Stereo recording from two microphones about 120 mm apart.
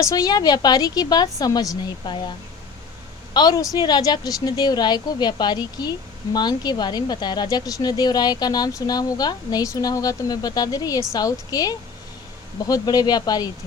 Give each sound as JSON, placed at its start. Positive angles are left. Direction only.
{"t": 0.0, "sound": "speech", "side_deg": 30}
{"t": 3.3, "sound": "speech", "side_deg": 30}